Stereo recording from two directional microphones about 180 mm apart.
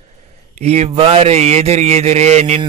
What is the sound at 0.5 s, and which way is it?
Speech, 35° right (ahead or behind).